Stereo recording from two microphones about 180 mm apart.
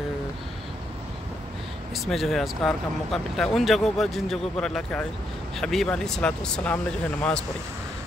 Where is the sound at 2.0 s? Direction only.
Centre (ahead or behind).